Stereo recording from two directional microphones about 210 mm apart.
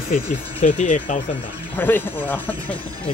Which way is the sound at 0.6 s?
35° left (ahead or behind).